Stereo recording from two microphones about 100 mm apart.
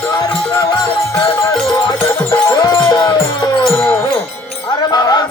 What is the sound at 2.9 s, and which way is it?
Music, 40° left (ahead or behind).